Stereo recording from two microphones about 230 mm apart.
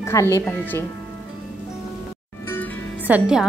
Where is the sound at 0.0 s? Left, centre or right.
Centre.